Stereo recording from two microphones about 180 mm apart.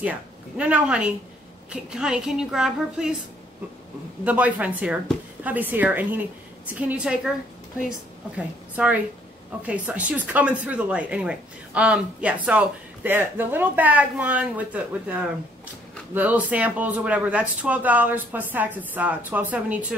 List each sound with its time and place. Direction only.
0.0 s a woman's voice: 5° right (ahead or behind)
4.2 s speech: 10° right (ahead or behind)
8.4 s a woman's voice: 5° right (ahead or behind)